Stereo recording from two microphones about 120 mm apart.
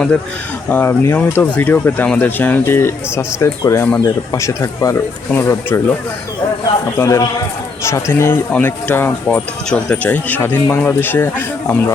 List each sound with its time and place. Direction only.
0.7 s speech: 20° left (ahead or behind)
7.0 s speech: 25° left (ahead or behind)